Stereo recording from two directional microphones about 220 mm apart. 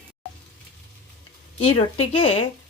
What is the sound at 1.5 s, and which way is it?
Speech, 25° left (ahead or behind).